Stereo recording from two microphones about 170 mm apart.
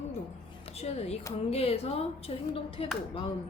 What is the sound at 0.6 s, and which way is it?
Speech, 35° left (ahead or behind).